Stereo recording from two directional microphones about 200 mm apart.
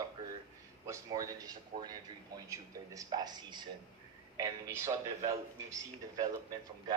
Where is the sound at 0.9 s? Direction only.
15° right (ahead or behind).